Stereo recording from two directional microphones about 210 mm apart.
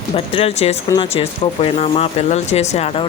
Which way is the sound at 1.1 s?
30° left (ahead or behind).